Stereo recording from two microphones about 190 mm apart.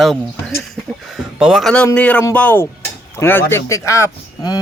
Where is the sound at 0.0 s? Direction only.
Centre (ahead or behind).